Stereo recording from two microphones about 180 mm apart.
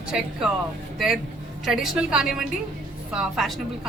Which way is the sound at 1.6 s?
Centre (ahead or behind).